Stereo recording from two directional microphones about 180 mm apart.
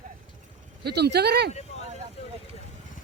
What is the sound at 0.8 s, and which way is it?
Speech, 65° right (ahead or behind).